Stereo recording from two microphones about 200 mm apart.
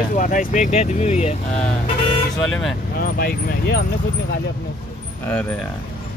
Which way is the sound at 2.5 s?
Centre (ahead or behind).